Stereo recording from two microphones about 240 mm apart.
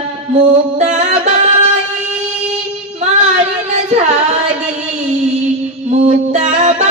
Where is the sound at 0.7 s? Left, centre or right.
Right.